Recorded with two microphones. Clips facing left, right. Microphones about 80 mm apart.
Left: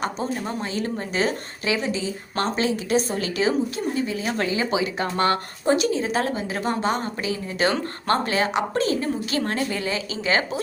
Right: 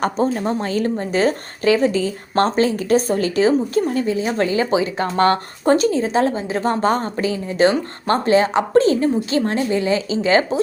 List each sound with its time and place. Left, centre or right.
0.0 s speech: right